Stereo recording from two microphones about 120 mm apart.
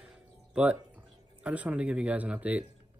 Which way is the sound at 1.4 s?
10° right (ahead or behind).